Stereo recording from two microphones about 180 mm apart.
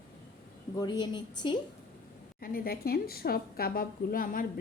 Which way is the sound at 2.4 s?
55° left (ahead or behind).